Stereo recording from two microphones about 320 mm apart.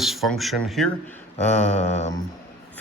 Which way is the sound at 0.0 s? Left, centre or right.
Centre.